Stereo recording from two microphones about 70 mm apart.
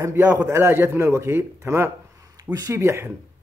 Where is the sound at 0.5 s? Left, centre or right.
Right.